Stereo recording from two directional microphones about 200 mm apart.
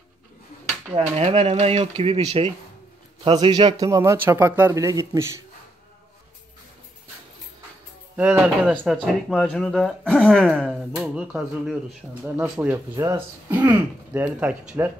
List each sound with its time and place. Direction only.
0.9 s speech: 30° right (ahead or behind); by 5.4 s 15° right (ahead or behind)
8.2 s speech: 10° right (ahead or behind)